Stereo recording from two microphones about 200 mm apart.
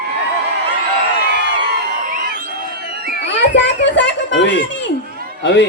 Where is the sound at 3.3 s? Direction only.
65° left (ahead or behind).